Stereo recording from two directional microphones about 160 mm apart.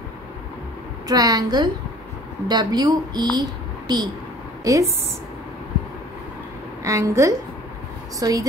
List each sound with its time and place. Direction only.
1.0 s speech: 20° right (ahead or behind)
6.8 s speech: 20° right (ahead or behind)